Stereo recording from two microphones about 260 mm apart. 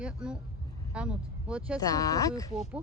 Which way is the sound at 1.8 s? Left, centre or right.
Centre.